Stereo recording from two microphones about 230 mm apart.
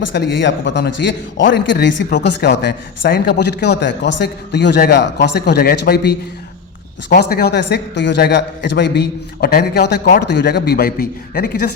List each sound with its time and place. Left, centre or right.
0.1 s speech: left